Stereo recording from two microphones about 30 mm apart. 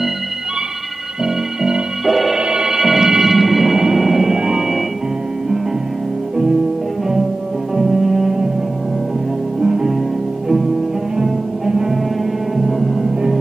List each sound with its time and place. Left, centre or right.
1.2 s organ: centre
2.0 s music: centre
2.3 s music: right; by 4.4 s centre
4.4 s music: centre
7.7 s music: centre
9.6 s music: centre
11.1 s music: centre
12.5 s music: centre
13.0 s music: centre